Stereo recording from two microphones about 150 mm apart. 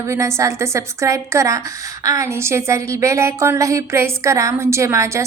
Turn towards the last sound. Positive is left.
turn(degrees=-20)  # may be behind; listen again after turning